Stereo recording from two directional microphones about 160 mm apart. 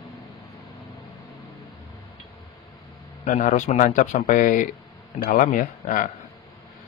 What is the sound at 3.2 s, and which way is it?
Speech, 50° left (ahead or behind).